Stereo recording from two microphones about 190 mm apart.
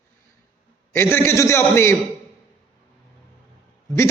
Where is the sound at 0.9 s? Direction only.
10° left (ahead or behind).